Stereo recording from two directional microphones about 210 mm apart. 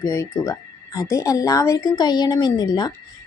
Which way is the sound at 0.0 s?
15° left (ahead or behind).